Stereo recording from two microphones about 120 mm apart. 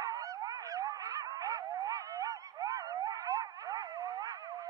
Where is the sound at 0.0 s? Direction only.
30° right (ahead or behind).